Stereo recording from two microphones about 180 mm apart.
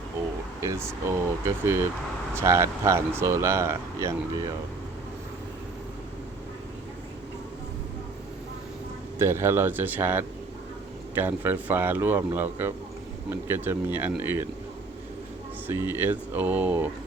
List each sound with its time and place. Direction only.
0.6 s speech: 15° right (ahead or behind)
9.1 s speech: 15° right (ahead or behind)
15.6 s speech: 10° right (ahead or behind)